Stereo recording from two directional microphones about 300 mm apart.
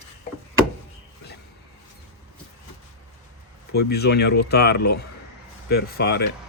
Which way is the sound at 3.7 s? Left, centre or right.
Left.